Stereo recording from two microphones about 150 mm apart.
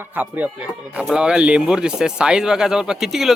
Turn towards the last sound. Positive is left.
turn(degrees=0)  # may be behind; listen again after turning